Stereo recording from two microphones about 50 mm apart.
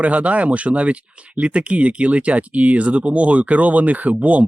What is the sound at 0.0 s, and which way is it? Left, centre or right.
Speech, right.